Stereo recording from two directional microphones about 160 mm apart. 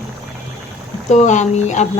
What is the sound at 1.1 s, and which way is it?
Speech, 45° left (ahead or behind).